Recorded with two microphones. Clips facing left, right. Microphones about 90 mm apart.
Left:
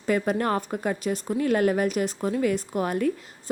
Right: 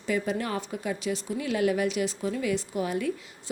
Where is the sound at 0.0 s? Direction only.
50° left (ahead or behind).